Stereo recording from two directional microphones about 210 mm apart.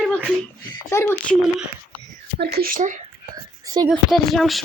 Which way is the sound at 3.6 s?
20° right (ahead or behind).